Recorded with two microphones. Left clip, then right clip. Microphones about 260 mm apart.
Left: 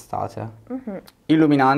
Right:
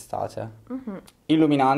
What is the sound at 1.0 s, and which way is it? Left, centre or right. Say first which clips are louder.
Speech: left 3 dB; left.